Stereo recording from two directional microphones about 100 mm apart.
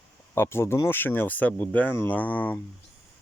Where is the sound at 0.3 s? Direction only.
25° left (ahead or behind).